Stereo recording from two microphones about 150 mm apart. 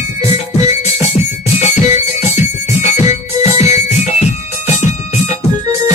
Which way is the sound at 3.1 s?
45° left (ahead or behind).